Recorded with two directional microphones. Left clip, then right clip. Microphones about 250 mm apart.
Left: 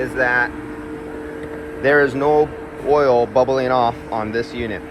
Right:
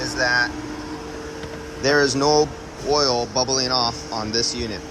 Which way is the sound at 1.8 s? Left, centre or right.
Centre.